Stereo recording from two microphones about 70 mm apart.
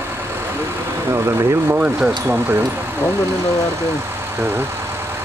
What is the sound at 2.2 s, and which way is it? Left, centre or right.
Speech, right.